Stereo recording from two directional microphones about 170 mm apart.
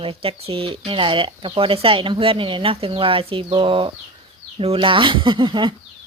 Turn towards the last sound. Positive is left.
turn(degrees=-30)  # may be behind; listen again after turning